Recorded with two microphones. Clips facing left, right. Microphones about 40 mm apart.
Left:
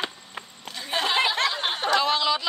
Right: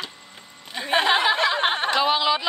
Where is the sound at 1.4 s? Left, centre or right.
Right.